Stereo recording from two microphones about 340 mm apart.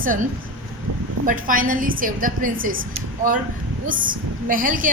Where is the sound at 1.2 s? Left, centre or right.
Right.